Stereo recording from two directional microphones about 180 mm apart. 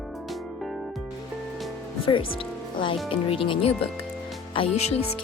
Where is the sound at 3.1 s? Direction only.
30° left (ahead or behind).